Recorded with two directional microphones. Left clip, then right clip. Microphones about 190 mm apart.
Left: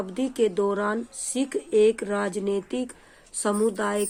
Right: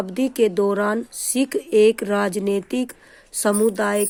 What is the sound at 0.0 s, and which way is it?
Speech, 40° right (ahead or behind).